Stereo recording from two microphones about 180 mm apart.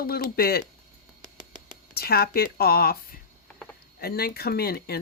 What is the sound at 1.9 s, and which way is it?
Speech, 60° left (ahead or behind).